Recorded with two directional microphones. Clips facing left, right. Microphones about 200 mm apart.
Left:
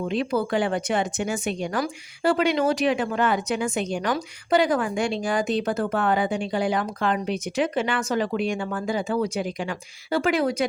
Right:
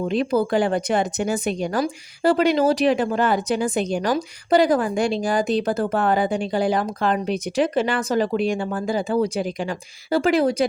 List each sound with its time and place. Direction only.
0.0 s speech: 40° right (ahead or behind)